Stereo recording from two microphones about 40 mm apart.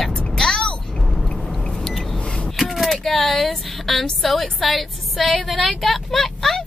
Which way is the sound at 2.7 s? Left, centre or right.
Centre.